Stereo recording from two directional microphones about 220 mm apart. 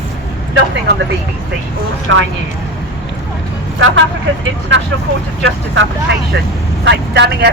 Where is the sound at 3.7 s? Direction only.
60° right (ahead or behind).